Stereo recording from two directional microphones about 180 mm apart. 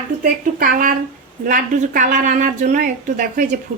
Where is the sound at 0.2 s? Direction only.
50° right (ahead or behind).